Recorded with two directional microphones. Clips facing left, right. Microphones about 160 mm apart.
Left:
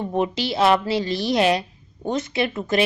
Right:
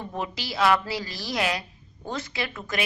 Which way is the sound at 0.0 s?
25° left (ahead or behind).